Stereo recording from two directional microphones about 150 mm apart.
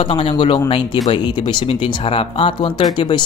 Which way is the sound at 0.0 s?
35° left (ahead or behind).